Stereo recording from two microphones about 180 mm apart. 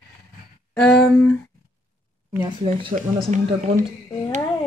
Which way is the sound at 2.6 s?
30° right (ahead or behind).